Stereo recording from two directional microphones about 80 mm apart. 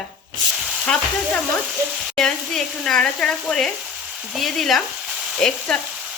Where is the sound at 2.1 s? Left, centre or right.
Centre.